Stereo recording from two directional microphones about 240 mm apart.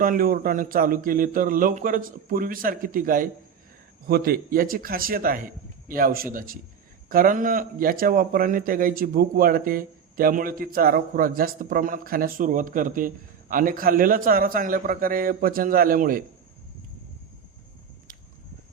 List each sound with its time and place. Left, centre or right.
0.0 s a man's voice: right